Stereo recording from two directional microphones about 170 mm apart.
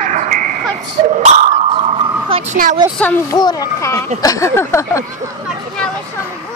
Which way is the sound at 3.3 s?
20° left (ahead or behind).